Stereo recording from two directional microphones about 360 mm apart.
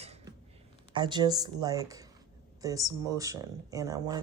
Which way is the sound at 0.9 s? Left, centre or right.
Centre.